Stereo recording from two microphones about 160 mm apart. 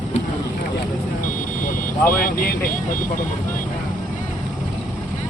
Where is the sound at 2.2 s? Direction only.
60° left (ahead or behind).